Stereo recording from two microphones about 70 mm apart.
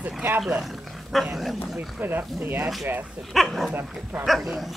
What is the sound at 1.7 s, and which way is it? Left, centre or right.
Speech, right.